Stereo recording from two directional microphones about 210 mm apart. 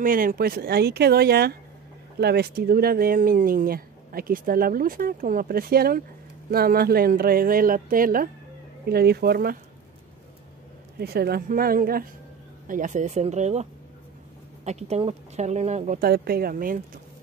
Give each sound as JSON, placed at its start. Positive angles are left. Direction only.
{"t": 0.0, "sound": "speech", "side_deg": -40}
{"t": 11.0, "sound": "speech", "side_deg": -50}